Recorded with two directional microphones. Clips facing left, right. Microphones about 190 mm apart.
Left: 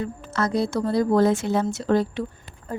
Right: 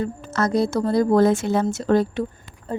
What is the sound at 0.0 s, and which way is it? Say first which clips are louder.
Speech: right 3 dB; 45° right (ahead or behind).